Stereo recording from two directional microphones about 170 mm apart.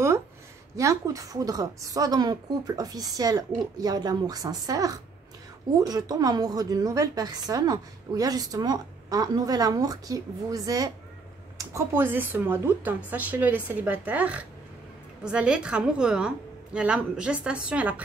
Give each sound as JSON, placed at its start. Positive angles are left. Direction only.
{"t": 0.7, "sound": "a woman's voice", "side_deg": -20}